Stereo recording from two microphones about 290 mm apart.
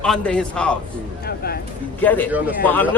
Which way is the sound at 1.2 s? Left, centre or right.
Left.